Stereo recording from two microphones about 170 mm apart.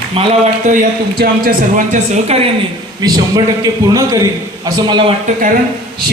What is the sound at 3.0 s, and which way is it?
A man's voice, 25° right (ahead or behind).